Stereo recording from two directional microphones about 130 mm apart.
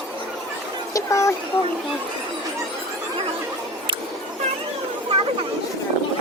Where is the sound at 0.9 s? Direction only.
25° left (ahead or behind).